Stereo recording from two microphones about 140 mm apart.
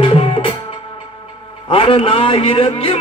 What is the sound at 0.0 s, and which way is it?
Music, 40° left (ahead or behind).